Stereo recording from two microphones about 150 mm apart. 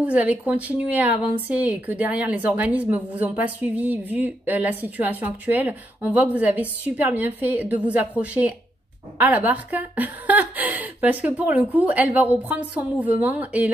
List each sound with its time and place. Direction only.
0.0 s a woman's voice: 10° right (ahead or behind)